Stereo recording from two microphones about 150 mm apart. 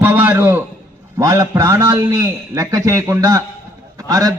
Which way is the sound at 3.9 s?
20° right (ahead or behind).